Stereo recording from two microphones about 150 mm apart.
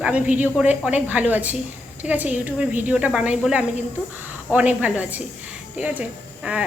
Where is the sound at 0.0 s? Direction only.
10° right (ahead or behind).